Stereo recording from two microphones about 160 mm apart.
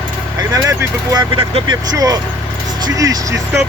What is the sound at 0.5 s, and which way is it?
Speech, 20° right (ahead or behind).